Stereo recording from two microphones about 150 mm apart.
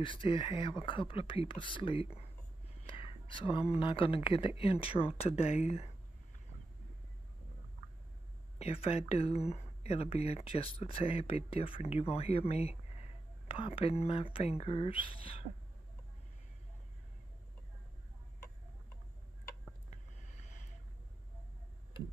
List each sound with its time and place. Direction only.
0.0 s speech: 35° left (ahead or behind)
8.5 s speech: 40° left (ahead or behind)
19.9 s a sound: 50° left (ahead or behind)